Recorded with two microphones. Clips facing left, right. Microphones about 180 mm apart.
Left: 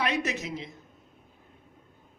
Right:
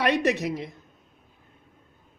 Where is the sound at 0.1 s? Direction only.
60° right (ahead or behind).